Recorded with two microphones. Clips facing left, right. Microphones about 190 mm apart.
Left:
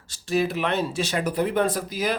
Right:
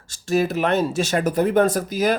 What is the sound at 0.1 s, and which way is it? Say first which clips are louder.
Speech: right 3 dB; 45° right (ahead or behind).